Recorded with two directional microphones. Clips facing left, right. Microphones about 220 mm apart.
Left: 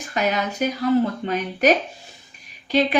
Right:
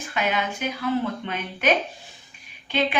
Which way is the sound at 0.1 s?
40° left (ahead or behind).